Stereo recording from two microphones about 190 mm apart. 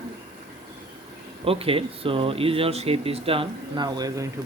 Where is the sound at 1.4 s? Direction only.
30° right (ahead or behind).